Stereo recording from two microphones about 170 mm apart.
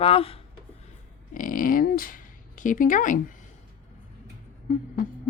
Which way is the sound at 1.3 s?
55° left (ahead or behind).